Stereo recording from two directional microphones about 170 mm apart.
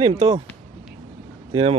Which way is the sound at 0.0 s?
25° right (ahead or behind).